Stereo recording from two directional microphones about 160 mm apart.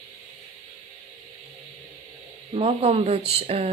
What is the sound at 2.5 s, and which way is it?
Speech, 40° right (ahead or behind).